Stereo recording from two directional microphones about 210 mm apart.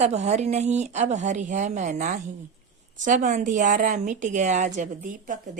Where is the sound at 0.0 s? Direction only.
30° right (ahead or behind).